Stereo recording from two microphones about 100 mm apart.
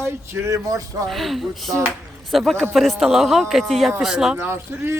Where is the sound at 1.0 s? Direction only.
Centre (ahead or behind).